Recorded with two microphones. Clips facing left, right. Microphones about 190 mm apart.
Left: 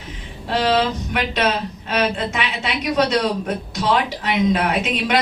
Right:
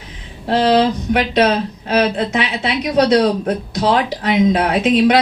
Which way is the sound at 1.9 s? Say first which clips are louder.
Right 5 dB; 40° right (ahead or behind).